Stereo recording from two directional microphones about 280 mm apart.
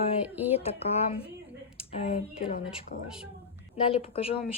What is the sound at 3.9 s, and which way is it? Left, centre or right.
Speech, left.